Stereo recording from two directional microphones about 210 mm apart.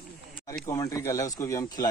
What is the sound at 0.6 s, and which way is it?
Speech, 15° left (ahead or behind).